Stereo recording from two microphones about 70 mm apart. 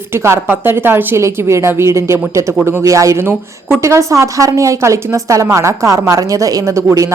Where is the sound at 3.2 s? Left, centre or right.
Right.